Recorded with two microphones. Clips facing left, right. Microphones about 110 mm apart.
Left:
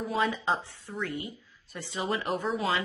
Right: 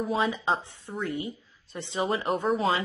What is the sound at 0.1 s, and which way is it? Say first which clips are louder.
A woman's voice: even; 20° right (ahead or behind).